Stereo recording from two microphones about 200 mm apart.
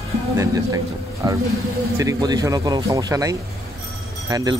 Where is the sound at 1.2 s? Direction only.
20° right (ahead or behind).